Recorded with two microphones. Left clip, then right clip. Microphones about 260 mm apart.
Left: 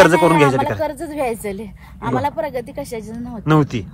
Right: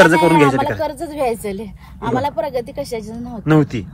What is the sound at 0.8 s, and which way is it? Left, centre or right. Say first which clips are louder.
Speech: right 1 dB; centre.